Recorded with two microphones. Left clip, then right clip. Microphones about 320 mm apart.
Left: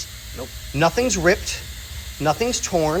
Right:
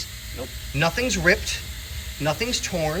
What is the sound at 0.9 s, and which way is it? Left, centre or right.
Speech, centre.